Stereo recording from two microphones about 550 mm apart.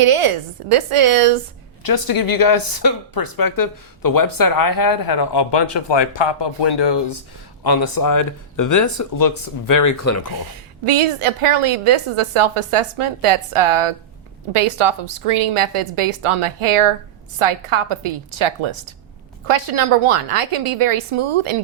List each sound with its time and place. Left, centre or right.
0.0 s a woman's voice: right
1.8 s speech: left
10.8 s a woman's voice: right